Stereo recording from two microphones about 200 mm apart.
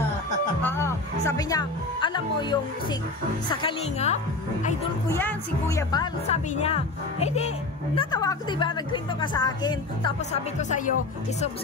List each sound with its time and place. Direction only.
0.6 s music: 10° left (ahead or behind)
1.2 s a woman's voice: 20° left (ahead or behind)
5.1 s a woman's voice: 15° left (ahead or behind)
6.2 s a woman's voice: 30° left (ahead or behind)
10.3 s speech: 35° left (ahead or behind)